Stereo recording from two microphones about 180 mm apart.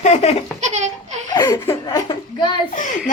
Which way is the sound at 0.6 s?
40° right (ahead or behind).